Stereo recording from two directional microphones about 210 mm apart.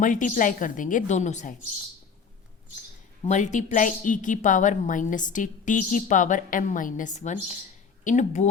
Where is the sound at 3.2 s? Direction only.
35° left (ahead or behind).